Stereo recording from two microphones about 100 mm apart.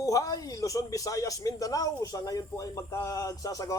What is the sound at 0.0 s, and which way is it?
Speech, 35° left (ahead or behind).